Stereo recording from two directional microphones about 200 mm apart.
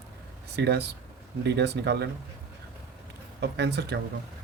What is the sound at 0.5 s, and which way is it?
Speech, 55° right (ahead or behind).